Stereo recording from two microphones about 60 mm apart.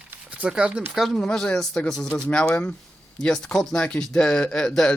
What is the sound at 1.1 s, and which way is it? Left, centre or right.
Speech, centre.